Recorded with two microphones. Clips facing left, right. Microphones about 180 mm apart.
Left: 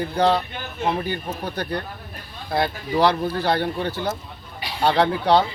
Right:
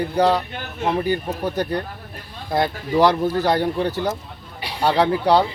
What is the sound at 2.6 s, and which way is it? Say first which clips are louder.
Speech: right 3 dB; 45° right (ahead or behind).